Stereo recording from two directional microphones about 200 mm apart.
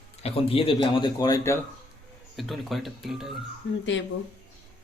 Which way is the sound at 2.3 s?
Centre (ahead or behind).